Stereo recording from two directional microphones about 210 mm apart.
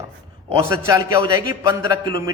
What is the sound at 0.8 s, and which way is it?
A man's voice, 15° right (ahead or behind).